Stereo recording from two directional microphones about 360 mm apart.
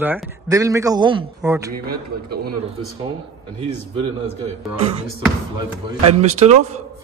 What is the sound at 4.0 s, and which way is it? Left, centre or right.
Speech, centre.